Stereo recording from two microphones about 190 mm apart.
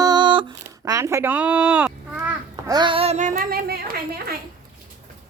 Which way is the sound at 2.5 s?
20° right (ahead or behind).